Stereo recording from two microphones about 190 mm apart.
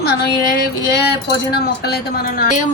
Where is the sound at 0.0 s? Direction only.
55° left (ahead or behind).